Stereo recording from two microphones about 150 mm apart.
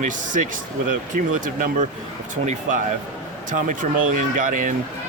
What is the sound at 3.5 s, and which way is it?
Speech, 60° right (ahead or behind).